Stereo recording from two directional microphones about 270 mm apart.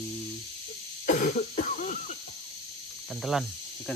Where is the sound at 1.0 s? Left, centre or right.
Left.